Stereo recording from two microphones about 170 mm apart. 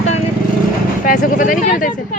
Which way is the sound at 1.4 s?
50° left (ahead or behind).